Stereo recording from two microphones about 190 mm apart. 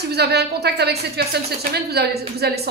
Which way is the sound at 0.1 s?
60° right (ahead or behind).